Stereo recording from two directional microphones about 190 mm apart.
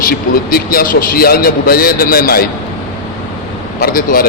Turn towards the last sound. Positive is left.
turn(degrees=50)  # may be behind; listen again after turning